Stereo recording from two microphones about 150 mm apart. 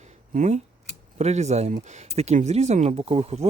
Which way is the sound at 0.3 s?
50° right (ahead or behind).